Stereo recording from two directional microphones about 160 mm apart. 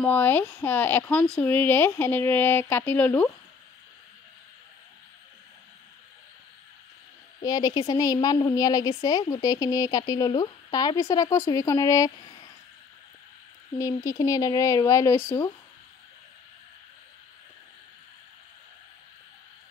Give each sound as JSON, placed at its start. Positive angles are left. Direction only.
{"t": 0.0, "sound": "speech", "side_deg": 10}
{"t": 7.4, "sound": "speech", "side_deg": 25}
{"t": 13.7, "sound": "speech", "side_deg": 20}